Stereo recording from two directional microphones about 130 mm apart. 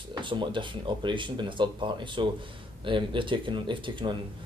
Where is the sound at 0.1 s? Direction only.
40° right (ahead or behind).